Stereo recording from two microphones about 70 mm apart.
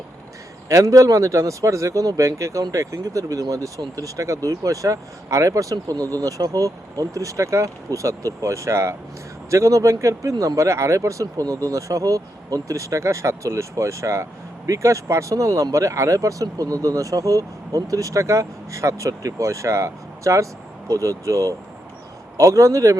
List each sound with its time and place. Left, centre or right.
0.7 s speech: right
5.7 s speech: right